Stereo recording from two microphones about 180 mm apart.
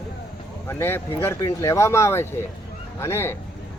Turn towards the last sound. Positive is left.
turn(degrees=15)  # may be behind; listen again after turning